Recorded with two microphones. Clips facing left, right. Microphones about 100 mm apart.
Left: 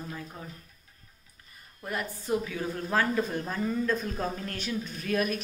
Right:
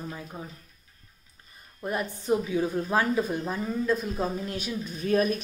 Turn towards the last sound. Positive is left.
turn(degrees=-30)  # may be behind; listen again after turning